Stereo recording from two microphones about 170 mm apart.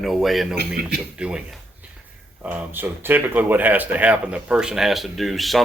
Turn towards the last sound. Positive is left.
turn(degrees=0)  # may be behind; listen again after turning